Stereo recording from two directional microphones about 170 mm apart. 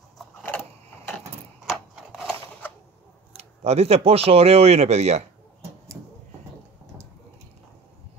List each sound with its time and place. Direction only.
1.7 s wood: centre (ahead or behind)
3.3 s speech: 40° right (ahead or behind)